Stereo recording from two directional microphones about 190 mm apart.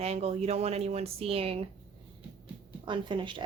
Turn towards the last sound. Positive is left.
turn(degrees=-25)  # may be behind; listen again after turning